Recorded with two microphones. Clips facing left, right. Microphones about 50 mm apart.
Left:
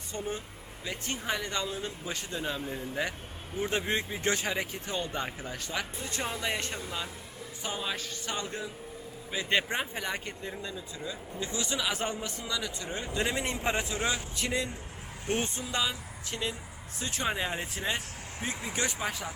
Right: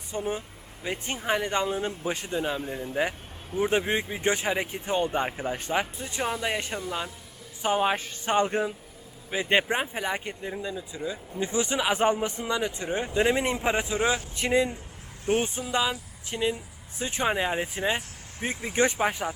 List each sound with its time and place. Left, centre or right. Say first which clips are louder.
0.1 s speech: right 5 dB; centre
3.6 s speech: right 5 dB; centre
7.8 s speech: right 9 dB; right